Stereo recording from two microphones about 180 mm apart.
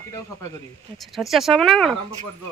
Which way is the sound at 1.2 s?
Centre (ahead or behind).